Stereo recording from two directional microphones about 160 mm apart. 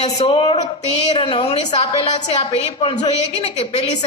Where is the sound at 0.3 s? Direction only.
35° left (ahead or behind).